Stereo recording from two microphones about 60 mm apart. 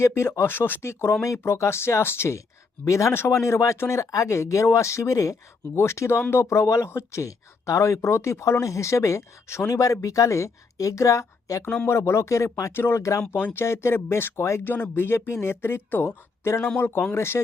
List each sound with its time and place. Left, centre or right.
0.0 s speech: left
2.8 s speech: left
3.1 s speech: left
11.9 s speech: left
12.7 s speech: left
13.0 s speech: left
13.5 s speech: left
14.6 s speech: left